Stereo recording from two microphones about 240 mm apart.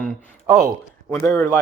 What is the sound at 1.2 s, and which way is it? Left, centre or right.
Speech, centre.